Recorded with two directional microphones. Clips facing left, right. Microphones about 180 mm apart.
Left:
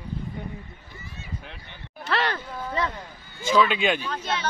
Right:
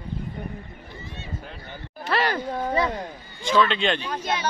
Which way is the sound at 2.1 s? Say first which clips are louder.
Right 2 dB; 5° right (ahead or behind).